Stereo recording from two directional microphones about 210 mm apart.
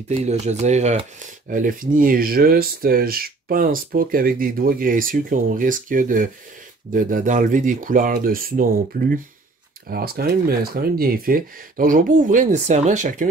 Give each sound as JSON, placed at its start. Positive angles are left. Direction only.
{"t": 0.1, "sound": "speech", "side_deg": -30}